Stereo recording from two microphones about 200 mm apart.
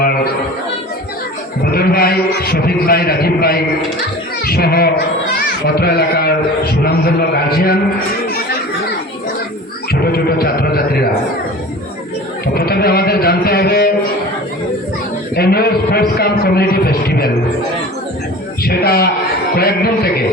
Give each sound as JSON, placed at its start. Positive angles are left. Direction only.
{"t": 1.7, "sound": "a man's voice", "side_deg": 50}
{"t": 9.9, "sound": "speech", "side_deg": 50}
{"t": 12.5, "sound": "a man's voice", "side_deg": 50}
{"t": 15.4, "sound": "a man's voice", "side_deg": 50}
{"t": 18.6, "sound": "a man's voice", "side_deg": 50}